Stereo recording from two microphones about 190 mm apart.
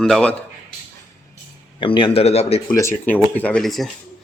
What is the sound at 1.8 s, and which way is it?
Speech, 25° left (ahead or behind).